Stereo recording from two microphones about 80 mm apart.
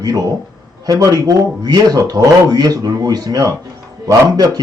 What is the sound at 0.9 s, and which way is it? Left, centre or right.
A man's voice, right.